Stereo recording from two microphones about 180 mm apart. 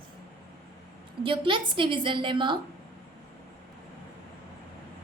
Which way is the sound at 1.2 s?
30° right (ahead or behind).